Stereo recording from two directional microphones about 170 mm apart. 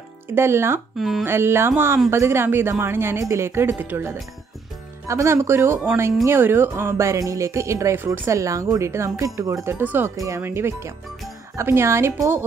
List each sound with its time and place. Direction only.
0.3 s speech: 15° right (ahead or behind)
0.9 s speech: centre (ahead or behind)
1.2 s speech: 15° right (ahead or behind)